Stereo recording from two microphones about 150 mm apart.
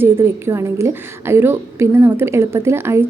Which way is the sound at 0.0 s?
15° right (ahead or behind).